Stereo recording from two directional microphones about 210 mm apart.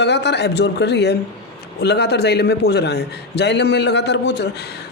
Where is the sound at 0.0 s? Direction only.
55° left (ahead or behind).